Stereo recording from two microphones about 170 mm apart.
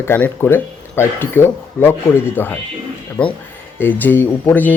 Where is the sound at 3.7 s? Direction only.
10° left (ahead or behind).